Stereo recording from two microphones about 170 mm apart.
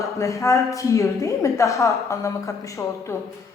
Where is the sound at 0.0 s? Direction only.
20° left (ahead or behind).